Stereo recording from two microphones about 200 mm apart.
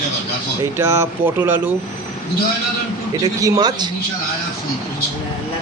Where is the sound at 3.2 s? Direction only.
20° right (ahead or behind).